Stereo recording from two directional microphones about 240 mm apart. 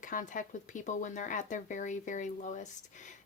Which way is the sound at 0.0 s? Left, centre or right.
Left.